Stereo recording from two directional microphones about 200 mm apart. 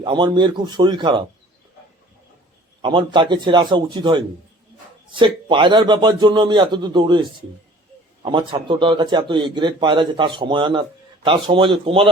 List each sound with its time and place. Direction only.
0.0 s speech: 25° right (ahead or behind)
2.8 s speech: 25° right (ahead or behind)
5.2 s speech: 25° right (ahead or behind)